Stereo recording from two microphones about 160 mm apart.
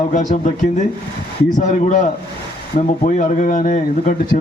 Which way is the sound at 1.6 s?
50° left (ahead or behind).